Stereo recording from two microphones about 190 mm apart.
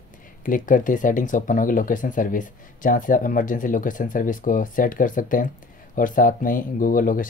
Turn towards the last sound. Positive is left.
turn(degrees=45)  # may be behind; listen again after turning